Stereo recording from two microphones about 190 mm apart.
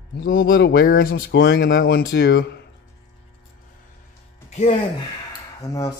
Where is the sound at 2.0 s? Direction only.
80° left.